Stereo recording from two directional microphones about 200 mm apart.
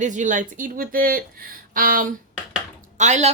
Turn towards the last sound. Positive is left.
turn(degrees=-35)  # may be behind; listen again after turning